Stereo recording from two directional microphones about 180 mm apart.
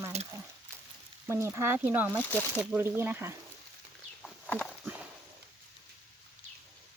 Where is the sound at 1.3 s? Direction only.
15° right (ahead or behind).